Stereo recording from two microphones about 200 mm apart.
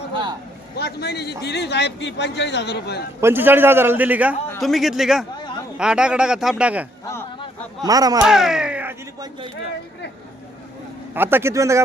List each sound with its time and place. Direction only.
0.1 s a sound: 25° right (ahead or behind)
0.8 s a man's voice: 55° left (ahead or behind)
3.2 s a man's voice: 10° right (ahead or behind)
7.9 s a man's voice: 20° right (ahead or behind)
8.2 s speech: 5° right (ahead or behind)
11.1 s a man's voice: 10° right (ahead or behind)